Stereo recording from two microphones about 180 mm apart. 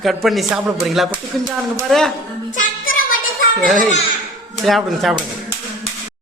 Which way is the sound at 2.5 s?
45° left (ahead or behind).